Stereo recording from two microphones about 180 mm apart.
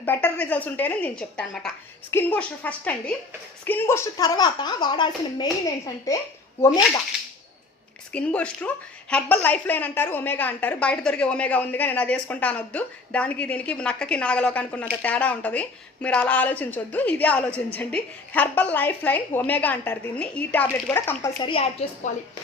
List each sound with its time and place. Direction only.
0.0 s a woman's voice: 10° left (ahead or behind)
8.1 s a woman's voice: 5° left (ahead or behind)
21.4 s a woman's voice: 30° left (ahead or behind)